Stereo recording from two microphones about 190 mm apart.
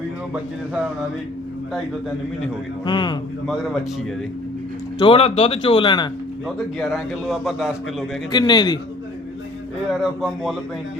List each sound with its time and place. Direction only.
2.8 s speech: 25° left (ahead or behind)
4.9 s speech: 30° left (ahead or behind)
6.7 s a man's voice: centre (ahead or behind)
8.3 s speech: 20° left (ahead or behind)
9.9 s a man's voice: centre (ahead or behind)